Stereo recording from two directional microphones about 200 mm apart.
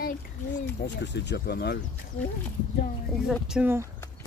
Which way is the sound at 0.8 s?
60° left (ahead or behind).